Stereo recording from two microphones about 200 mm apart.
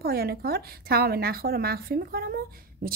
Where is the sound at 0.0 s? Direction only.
50° right (ahead or behind).